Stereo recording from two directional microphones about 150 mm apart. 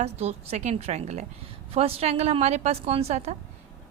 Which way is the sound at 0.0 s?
45° right (ahead or behind).